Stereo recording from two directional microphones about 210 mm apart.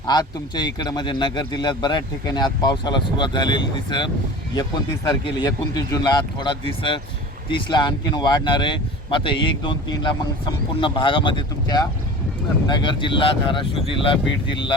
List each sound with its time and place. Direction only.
0.1 s a man's voice: 20° left (ahead or behind)